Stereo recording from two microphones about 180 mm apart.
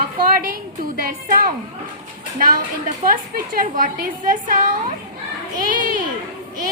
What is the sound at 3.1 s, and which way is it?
A woman's voice, 50° right (ahead or behind).